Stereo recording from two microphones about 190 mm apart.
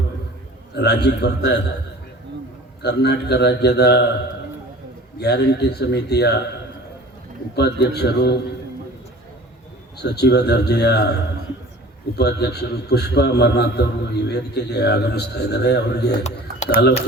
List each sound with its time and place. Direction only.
0.7 s a man's voice: 60° left (ahead or behind)
2.8 s a man's voice: 60° left (ahead or behind)
5.2 s a man's voice: 60° left (ahead or behind)
7.5 s a man's voice: 60° left (ahead or behind)
10.0 s a man's voice: 60° left (ahead or behind)
12.1 s a man's voice: 60° left (ahead or behind)